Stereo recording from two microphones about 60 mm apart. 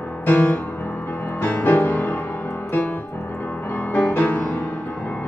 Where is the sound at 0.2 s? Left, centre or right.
Left.